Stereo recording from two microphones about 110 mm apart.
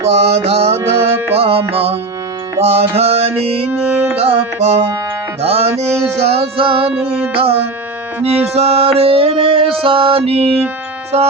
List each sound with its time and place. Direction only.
0.1 s music: 75° right (ahead or behind)
0.9 s music: 25° right (ahead or behind)
1.4 s music: 60° right (ahead or behind)
3.8 s music: 15° right (ahead or behind)
4.2 s music: 65° right (ahead or behind)
5.7 s a sound: 25° right (ahead or behind)
6.2 s music: 60° right (ahead or behind)
6.9 s music: 10° right (ahead or behind)
7.3 s music: 60° right (ahead or behind)